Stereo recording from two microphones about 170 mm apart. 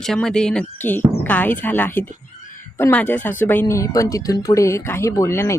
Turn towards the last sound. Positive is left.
turn(degrees=15)  # may be behind; listen again after turning